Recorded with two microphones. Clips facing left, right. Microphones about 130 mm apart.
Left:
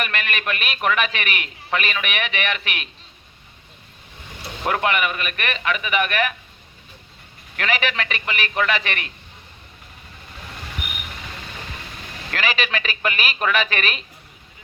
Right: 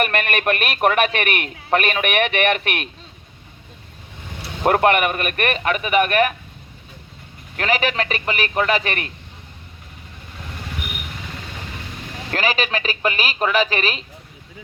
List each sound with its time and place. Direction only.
0.0 s a man's voice: 50° right (ahead or behind)
4.6 s a man's voice: 45° right (ahead or behind)
7.5 s speech: 35° right (ahead or behind)
12.3 s speech: 40° right (ahead or behind)